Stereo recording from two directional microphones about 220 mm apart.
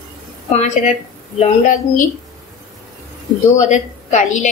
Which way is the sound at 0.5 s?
30° left (ahead or behind).